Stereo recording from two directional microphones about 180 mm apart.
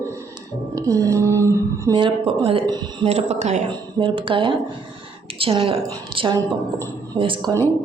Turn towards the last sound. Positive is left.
turn(degrees=-30)  # may be behind; listen again after turning